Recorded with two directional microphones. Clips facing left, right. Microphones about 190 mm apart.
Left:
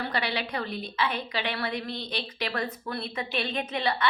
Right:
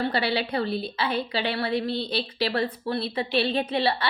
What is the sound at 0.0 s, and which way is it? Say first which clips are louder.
A woman's voice: right 5 dB; 30° right (ahead or behind).